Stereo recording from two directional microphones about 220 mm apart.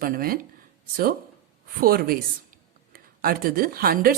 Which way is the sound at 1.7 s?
40° right (ahead or behind).